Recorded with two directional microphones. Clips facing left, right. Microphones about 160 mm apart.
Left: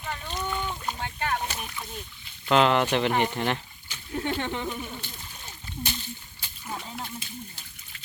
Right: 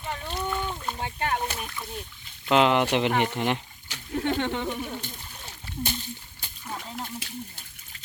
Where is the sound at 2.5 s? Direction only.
15° right (ahead or behind).